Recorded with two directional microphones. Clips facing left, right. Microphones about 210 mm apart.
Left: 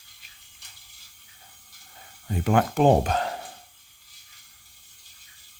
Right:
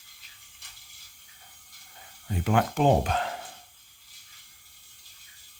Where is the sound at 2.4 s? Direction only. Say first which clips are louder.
Left 3 dB; 50° left (ahead or behind).